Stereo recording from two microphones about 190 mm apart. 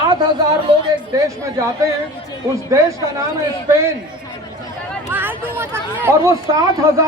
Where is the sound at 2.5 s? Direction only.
15° right (ahead or behind).